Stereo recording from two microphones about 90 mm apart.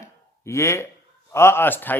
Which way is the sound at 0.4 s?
30° left (ahead or behind).